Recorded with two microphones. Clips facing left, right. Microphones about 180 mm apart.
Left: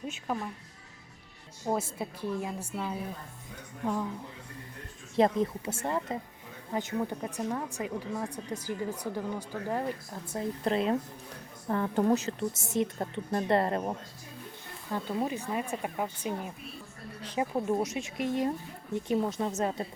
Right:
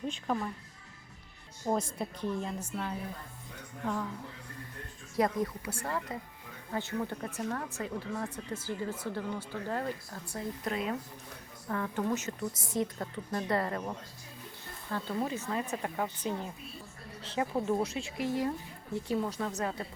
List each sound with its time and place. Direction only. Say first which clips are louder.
0.1 s speech: even; 5° left (ahead or behind)
1.6 s speech: even; 5° left (ahead or behind)
5.1 s a woman's voice: left 4 dB; 25° left (ahead or behind)
10.6 s a woman's voice: left 7 dB; 30° left (ahead or behind)
14.8 s a woman's voice: left 2 dB; 15° left (ahead or behind)